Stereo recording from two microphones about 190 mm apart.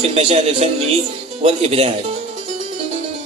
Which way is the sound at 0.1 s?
35° right (ahead or behind).